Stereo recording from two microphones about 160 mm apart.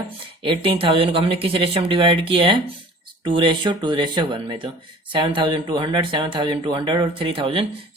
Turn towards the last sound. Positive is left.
turn(degrees=-35)  # may be behind; listen again after turning